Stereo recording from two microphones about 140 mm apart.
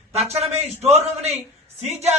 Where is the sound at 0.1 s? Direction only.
50° right (ahead or behind).